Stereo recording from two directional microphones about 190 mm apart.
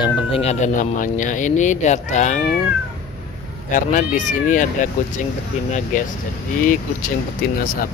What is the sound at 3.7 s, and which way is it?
Speech, 40° left (ahead or behind).